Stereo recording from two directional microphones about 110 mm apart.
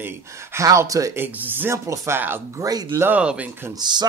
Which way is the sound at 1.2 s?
20° right (ahead or behind).